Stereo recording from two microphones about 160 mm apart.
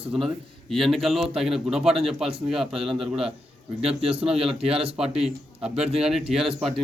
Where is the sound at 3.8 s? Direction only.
40° right (ahead or behind).